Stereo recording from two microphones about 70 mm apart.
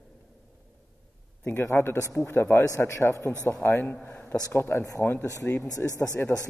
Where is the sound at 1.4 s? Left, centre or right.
Left.